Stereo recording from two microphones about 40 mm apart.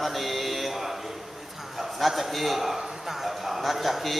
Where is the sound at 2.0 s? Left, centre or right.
Centre.